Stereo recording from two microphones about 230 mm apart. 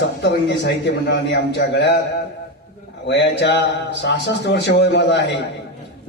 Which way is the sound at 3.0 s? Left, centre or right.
Left.